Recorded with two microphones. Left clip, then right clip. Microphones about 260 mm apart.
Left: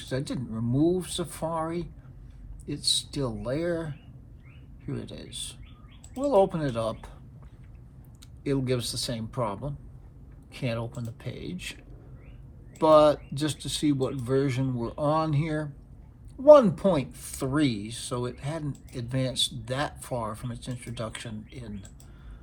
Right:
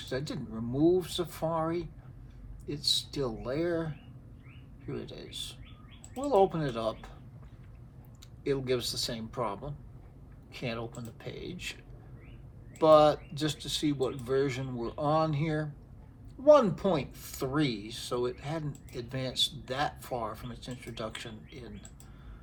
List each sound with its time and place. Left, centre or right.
0.0 s speech: left
8.4 s speech: left
12.8 s speech: left